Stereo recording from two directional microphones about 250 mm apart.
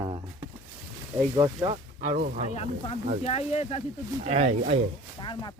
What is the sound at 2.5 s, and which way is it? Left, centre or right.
Speech, left.